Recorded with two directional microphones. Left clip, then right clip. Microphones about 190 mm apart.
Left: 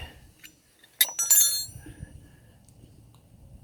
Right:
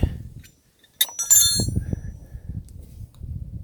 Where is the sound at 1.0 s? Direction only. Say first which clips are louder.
Right 2 dB; 25° left (ahead or behind).